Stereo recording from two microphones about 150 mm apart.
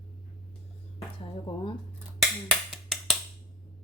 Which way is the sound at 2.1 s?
Centre (ahead or behind).